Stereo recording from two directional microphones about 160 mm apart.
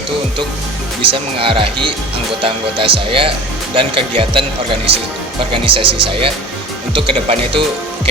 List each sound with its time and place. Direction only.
1.0 s speech: 35° right (ahead or behind)